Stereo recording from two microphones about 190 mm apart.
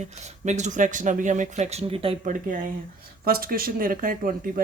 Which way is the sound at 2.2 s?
45° right (ahead or behind).